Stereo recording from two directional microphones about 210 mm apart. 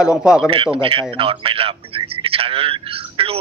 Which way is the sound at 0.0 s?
5° right (ahead or behind).